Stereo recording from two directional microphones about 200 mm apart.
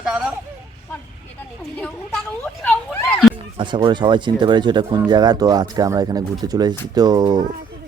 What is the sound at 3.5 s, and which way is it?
Speech, 25° right (ahead or behind).